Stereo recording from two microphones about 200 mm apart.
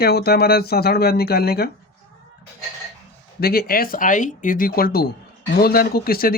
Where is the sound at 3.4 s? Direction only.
50° left (ahead or behind).